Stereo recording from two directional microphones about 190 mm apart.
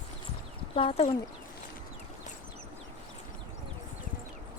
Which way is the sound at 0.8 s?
30° left (ahead or behind).